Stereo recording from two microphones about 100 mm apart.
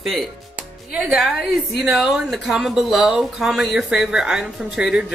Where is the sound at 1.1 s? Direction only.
Centre (ahead or behind).